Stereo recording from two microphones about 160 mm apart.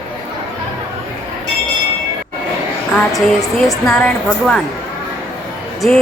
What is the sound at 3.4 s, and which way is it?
Speech, 20° left (ahead or behind).